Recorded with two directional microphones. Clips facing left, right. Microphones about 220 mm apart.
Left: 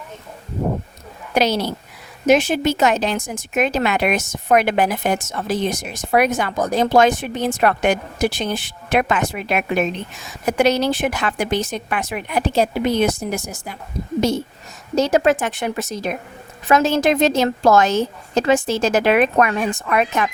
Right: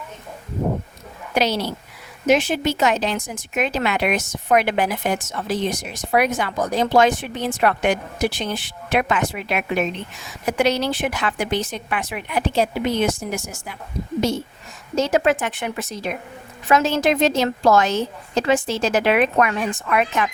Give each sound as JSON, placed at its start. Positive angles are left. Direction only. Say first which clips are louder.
{"t": 1.4, "sound": "a woman's voice", "louder": "left 2 dB", "side_deg": 45}
{"t": 14.9, "sound": "a woman's voice", "louder": "left 3 dB", "side_deg": 40}